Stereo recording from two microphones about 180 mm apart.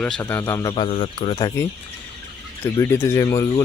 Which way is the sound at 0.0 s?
10° left (ahead or behind).